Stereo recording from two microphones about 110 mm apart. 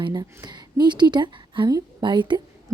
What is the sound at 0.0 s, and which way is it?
A woman's voice, 40° right (ahead or behind).